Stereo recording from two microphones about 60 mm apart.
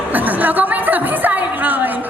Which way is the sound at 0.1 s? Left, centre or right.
Right.